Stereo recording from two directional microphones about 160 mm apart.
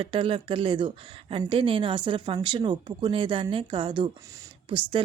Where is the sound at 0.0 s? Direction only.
35° right (ahead or behind).